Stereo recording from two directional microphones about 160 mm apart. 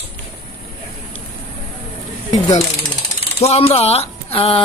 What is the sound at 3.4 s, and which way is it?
Speech, 40° left (ahead or behind).